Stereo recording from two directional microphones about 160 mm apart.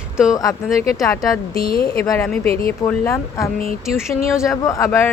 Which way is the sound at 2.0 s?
20° left (ahead or behind).